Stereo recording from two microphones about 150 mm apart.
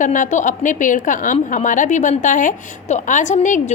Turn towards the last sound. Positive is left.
turn(degrees=55)  # may be behind; listen again after turning